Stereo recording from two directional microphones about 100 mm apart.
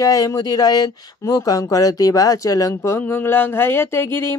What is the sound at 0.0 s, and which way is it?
Speech, 35° left (ahead or behind).